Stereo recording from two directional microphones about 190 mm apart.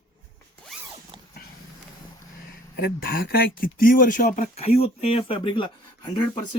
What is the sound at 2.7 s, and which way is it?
Speech, 55° left (ahead or behind).